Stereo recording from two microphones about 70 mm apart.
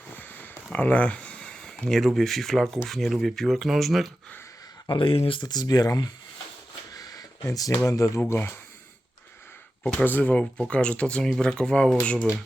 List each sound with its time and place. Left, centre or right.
0.1 s a sound: left
1.8 s speech: centre
5.4 s speech: left
6.9 s a sound: left
7.9 s speech: left
9.8 s speech: left